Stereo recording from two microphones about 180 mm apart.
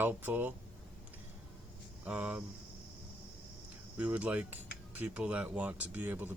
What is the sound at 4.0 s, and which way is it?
Speech, 10° right (ahead or behind).